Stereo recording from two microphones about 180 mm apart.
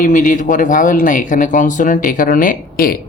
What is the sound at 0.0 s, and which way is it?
Speech, 45° left (ahead or behind).